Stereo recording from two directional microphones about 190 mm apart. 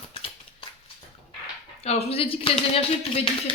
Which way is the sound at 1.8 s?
30° left (ahead or behind).